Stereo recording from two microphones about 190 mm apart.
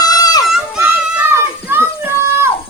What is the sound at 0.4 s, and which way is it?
Children playing, 5° right (ahead or behind).